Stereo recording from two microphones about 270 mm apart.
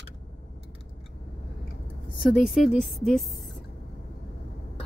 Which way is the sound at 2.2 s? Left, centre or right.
Centre.